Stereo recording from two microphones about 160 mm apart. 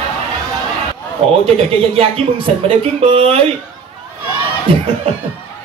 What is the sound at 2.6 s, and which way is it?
Speech, 35° right (ahead or behind).